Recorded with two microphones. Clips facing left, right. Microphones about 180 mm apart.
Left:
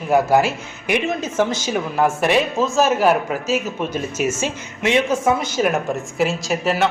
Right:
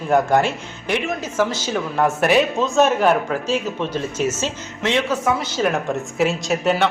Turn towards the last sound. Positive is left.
turn(degrees=0)  # may be behind; listen again after turning